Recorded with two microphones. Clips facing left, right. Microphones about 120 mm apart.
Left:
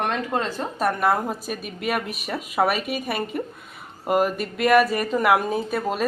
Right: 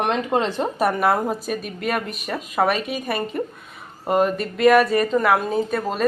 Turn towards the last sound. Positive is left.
turn(degrees=10)  # may be behind; listen again after turning